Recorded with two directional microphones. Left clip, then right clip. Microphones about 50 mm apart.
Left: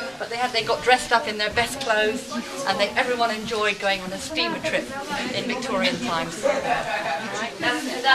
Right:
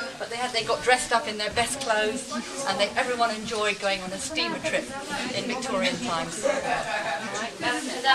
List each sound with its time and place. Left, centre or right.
0.4 s a woman's voice: centre